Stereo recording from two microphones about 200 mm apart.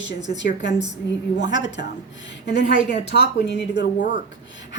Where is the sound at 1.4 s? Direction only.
65° left (ahead or behind).